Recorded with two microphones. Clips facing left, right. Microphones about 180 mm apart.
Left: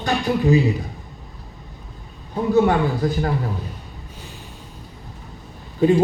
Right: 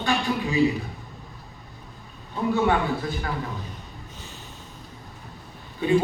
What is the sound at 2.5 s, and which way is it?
Speech, 40° left (ahead or behind).